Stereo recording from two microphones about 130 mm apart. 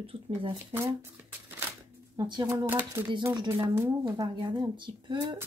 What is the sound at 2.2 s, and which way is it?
Speech, 35° right (ahead or behind).